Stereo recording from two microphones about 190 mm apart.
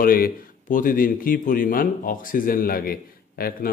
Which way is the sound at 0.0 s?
50° left (ahead or behind).